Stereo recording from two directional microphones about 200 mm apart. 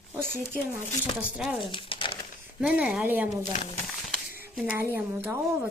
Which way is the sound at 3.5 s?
35° left (ahead or behind).